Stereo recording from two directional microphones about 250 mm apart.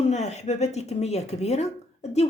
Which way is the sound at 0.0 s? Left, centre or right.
Left.